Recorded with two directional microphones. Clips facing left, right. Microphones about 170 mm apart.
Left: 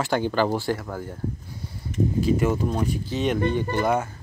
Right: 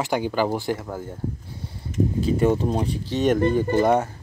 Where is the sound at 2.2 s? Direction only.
30° right (ahead or behind).